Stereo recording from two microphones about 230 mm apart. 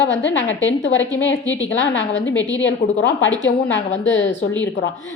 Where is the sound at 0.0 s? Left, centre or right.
Left.